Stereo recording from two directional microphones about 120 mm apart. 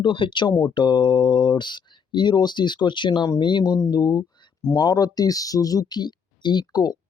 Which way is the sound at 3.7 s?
30° left (ahead or behind).